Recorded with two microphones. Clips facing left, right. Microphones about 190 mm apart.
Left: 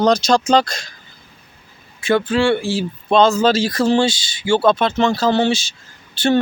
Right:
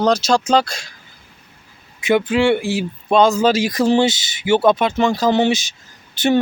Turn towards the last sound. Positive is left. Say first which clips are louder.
# even
turn(degrees=-20)  # may be behind; listen again after turning